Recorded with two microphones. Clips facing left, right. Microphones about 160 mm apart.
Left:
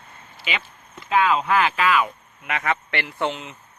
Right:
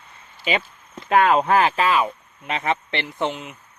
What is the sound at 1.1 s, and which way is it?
Speech, 50° right (ahead or behind).